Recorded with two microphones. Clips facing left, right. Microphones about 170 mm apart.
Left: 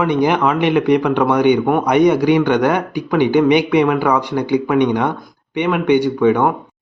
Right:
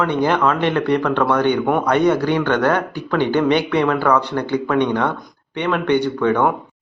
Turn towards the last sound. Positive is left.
turn(degrees=10)  # may be behind; listen again after turning